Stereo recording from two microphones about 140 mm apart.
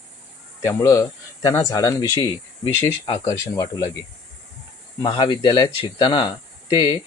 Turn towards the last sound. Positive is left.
turn(degrees=30)  # may be behind; listen again after turning